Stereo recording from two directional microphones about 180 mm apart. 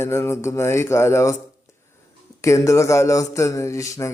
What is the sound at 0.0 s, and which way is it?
Speech, 15° left (ahead or behind).